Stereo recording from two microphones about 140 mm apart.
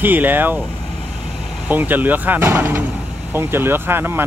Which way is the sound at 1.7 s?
15° right (ahead or behind).